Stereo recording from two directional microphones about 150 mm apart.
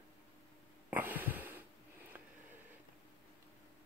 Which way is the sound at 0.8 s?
10° right (ahead or behind).